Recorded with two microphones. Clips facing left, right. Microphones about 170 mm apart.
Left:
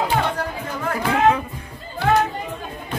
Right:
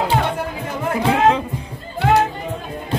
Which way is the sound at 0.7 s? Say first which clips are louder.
Right 3 dB; 25° right (ahead or behind).